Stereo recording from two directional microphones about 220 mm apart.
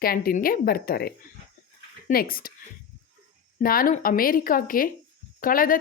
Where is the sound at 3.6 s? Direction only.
40° left (ahead or behind).